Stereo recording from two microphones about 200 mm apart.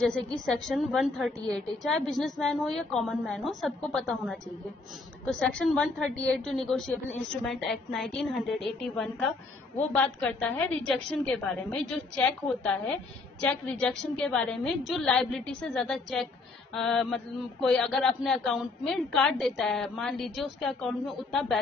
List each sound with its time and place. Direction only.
0.1 s a man's voice: centre (ahead or behind)